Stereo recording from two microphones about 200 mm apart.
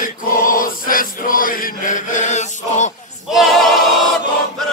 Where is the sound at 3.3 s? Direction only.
Centre (ahead or behind).